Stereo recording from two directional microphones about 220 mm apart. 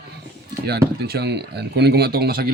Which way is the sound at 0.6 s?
45° right (ahead or behind).